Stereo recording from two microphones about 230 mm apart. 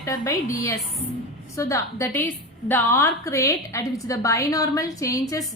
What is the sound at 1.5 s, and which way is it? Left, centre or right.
A woman's voice, centre.